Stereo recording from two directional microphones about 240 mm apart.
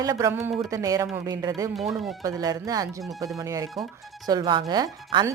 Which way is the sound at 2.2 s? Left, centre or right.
Centre.